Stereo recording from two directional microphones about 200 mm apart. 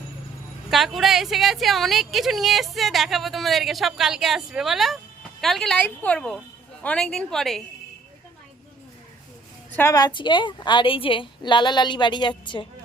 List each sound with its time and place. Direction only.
0.7 s speech: centre (ahead or behind)
9.7 s a woman's voice: 15° left (ahead or behind)